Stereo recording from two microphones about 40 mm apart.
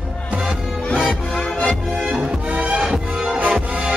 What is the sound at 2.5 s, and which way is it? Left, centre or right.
Music, right.